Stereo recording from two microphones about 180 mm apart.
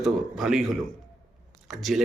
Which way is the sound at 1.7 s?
Centre (ahead or behind).